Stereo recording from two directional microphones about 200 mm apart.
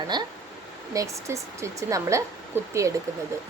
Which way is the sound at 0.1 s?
20° right (ahead or behind).